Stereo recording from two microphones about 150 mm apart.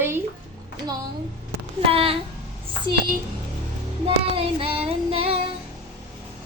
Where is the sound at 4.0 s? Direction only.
40° right (ahead or behind).